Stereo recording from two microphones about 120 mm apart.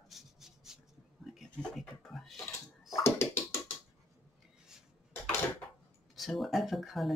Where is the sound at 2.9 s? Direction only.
25° left (ahead or behind).